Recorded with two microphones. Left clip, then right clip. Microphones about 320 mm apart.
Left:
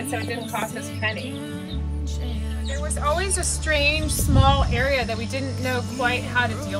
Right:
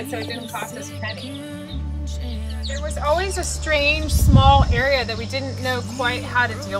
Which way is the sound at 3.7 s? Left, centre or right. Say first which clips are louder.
Right 3 dB; right.